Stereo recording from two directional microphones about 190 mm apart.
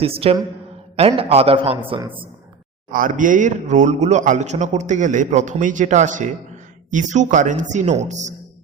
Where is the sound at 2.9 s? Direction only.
45° right (ahead or behind).